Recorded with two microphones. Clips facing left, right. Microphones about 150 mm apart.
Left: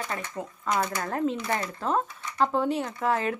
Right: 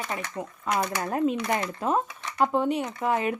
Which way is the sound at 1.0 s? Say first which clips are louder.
Right 2 dB; 15° right (ahead or behind).